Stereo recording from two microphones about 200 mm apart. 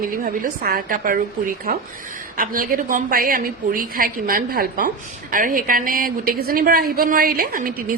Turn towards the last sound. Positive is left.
turn(degrees=-45)  # may be behind; listen again after turning